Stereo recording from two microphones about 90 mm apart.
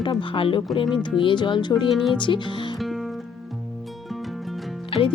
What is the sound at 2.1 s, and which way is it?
Speech, 65° left (ahead or behind).